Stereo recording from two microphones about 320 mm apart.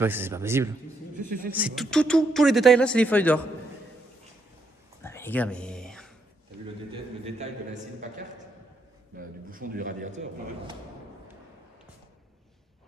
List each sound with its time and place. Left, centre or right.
0.0 s speech: centre
1.1 s speech: right
1.5 s speech: centre
5.0 s whispering: centre
6.9 s a man's voice: right
9.5 s a man's voice: right